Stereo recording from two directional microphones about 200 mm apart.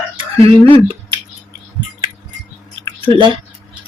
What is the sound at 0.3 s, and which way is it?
Speech, 30° right (ahead or behind).